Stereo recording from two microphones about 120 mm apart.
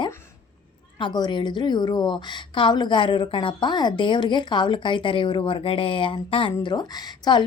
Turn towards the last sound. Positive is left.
turn(degrees=35)  # may be behind; listen again after turning